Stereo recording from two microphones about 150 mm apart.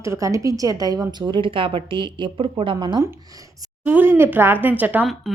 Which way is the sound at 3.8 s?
10° right (ahead or behind).